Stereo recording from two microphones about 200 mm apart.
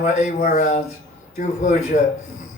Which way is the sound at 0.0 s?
35° left (ahead or behind).